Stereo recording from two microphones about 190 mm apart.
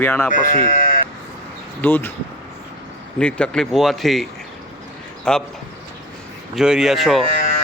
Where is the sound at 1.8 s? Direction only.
10° left (ahead or behind).